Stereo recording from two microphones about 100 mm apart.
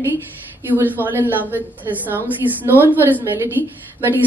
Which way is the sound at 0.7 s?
20° right (ahead or behind).